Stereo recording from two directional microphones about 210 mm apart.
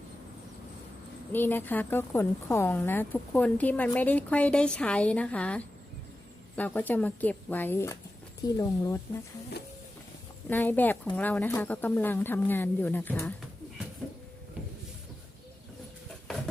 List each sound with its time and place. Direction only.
1.3 s a woman's voice: 10° left (ahead or behind)
10.5 s a woman's voice: 10° left (ahead or behind)